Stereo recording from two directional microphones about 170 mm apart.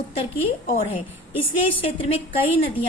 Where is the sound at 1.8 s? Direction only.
35° left (ahead or behind).